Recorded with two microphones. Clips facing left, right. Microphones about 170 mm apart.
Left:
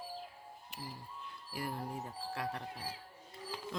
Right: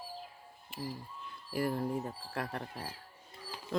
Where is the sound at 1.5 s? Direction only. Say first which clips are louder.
Right 8 dB; 55° right (ahead or behind).